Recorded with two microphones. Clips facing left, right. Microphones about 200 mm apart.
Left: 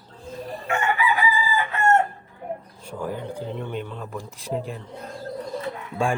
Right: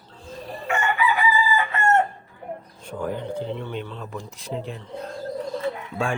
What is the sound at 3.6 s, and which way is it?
Speech, 10° left (ahead or behind).